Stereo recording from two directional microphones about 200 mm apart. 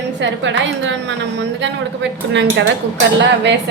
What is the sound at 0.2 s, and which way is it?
A woman's voice, 65° right (ahead or behind).